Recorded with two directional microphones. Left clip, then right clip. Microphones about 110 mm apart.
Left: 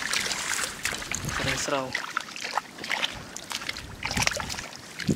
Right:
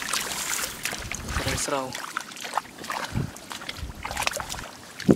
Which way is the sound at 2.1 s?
Centre (ahead or behind).